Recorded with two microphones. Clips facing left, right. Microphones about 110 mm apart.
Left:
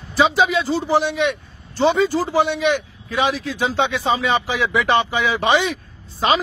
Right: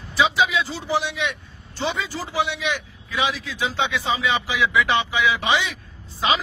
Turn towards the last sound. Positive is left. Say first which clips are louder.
# left 4 dB
turn(degrees=45)  # may be behind; listen again after turning